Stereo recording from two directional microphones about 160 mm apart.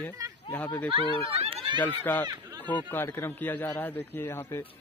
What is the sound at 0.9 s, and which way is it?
Speech, 40° right (ahead or behind).